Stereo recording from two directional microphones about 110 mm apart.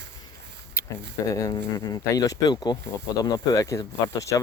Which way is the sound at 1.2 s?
30° left (ahead or behind).